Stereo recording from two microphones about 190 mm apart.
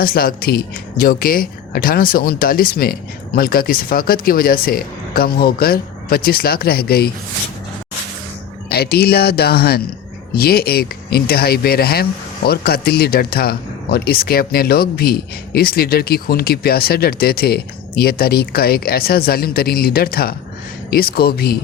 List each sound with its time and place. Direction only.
0.0 s speech: 50° left (ahead or behind)
8.7 s speech: 55° left (ahead or behind)